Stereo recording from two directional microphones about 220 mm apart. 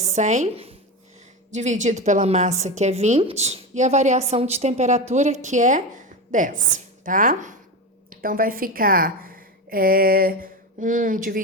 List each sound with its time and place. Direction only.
0.0 s a woman's voice: 30° right (ahead or behind)